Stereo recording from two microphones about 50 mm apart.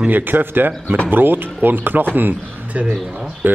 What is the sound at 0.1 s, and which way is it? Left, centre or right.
A man's voice, right.